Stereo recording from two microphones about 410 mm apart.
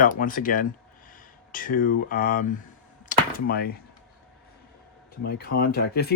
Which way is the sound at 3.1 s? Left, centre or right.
Centre.